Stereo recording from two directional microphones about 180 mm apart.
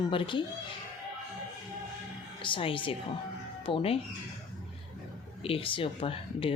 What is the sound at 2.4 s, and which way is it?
A woman's voice, 30° left (ahead or behind).